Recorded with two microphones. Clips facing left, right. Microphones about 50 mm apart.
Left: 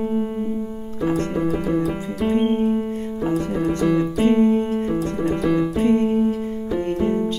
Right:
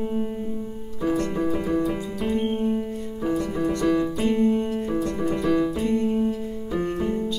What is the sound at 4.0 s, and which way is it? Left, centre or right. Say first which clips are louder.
Keyboard: left 5 dB; left.